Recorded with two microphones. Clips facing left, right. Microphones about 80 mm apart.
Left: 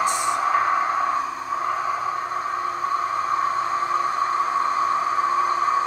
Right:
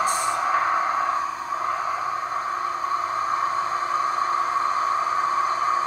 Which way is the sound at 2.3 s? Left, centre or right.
Right.